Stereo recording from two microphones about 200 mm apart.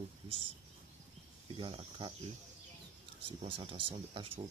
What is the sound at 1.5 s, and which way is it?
Speech, 25° right (ahead or behind).